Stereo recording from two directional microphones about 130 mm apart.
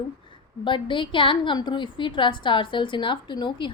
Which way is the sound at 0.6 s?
40° left (ahead or behind).